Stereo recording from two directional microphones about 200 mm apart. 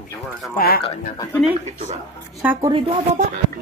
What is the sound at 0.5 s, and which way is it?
Speech, 50° left (ahead or behind).